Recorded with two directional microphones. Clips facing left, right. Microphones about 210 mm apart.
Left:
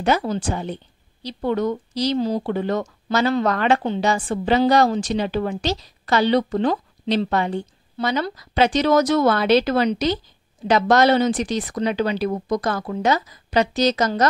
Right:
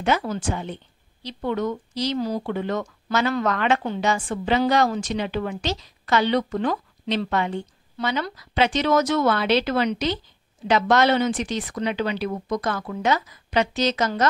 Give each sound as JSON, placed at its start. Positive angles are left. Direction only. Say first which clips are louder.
{"t": 0.2, "sound": "speech", "louder": "left 3 dB", "side_deg": 35}